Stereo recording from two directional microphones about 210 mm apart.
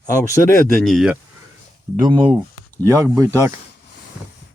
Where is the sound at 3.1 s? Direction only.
15° right (ahead or behind).